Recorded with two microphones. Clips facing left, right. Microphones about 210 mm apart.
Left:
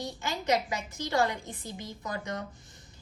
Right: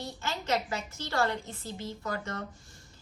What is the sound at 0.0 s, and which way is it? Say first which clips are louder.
A woman's voice: left 3 dB; 15° left (ahead or behind).